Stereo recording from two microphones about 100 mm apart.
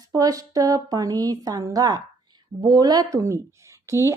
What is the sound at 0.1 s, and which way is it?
Speech, 35° right (ahead or behind).